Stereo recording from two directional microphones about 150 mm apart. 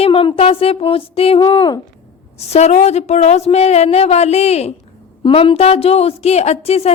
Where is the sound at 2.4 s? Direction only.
45° left (ahead or behind).